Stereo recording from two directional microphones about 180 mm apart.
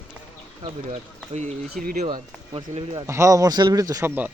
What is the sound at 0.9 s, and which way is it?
Speech, 40° right (ahead or behind).